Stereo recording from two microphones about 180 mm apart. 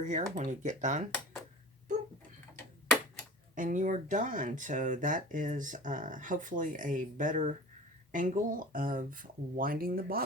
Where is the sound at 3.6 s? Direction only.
45° right (ahead or behind).